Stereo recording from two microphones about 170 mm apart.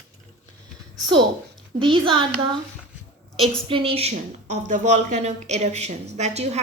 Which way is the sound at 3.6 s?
30° right (ahead or behind).